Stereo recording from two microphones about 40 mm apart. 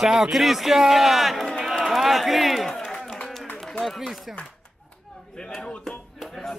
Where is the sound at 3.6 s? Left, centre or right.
Centre.